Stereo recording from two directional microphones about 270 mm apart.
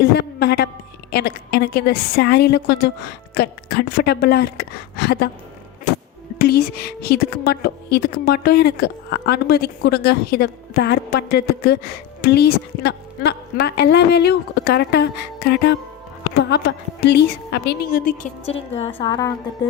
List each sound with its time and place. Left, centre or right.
0.0 s a woman's voice: left
6.4 s a woman's voice: left; by 19.3 s centre